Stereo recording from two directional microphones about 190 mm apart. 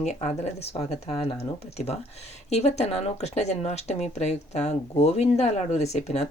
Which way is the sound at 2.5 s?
35° left (ahead or behind).